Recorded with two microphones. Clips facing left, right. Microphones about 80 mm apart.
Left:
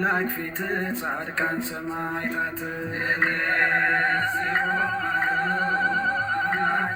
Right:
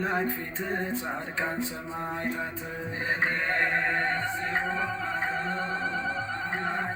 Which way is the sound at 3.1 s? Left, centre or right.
Left.